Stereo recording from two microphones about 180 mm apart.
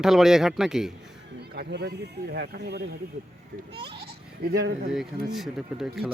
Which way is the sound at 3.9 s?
60° right (ahead or behind).